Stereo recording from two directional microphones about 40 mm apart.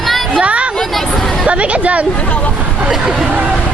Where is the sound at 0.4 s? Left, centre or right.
Right.